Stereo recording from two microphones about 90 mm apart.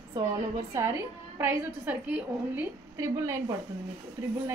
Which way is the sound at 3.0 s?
35° right (ahead or behind).